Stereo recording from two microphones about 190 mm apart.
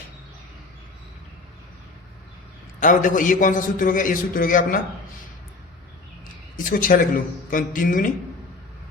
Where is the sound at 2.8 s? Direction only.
45° left (ahead or behind).